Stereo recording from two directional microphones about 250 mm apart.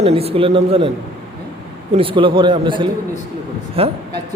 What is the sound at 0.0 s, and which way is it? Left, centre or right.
Speech, right.